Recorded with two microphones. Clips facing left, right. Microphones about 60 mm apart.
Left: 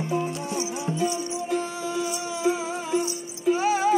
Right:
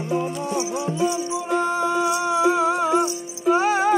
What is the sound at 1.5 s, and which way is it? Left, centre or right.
Music, right.